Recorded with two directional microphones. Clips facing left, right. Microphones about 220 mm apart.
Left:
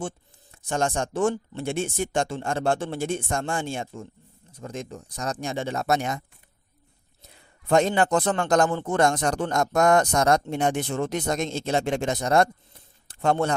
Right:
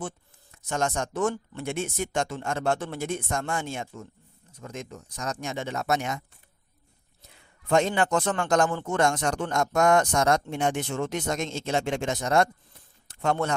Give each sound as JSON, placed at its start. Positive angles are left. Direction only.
{"t": 0.5, "sound": "speech", "side_deg": 30}
{"t": 7.7, "sound": "speech", "side_deg": 35}
{"t": 13.1, "sound": "a sound", "side_deg": 30}